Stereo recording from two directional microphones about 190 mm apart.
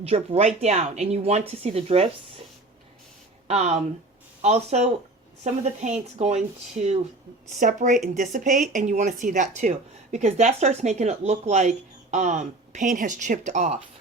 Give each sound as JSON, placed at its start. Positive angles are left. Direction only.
{"t": 0.0, "sound": "speech", "side_deg": -35}
{"t": 3.4, "sound": "speech", "side_deg": -35}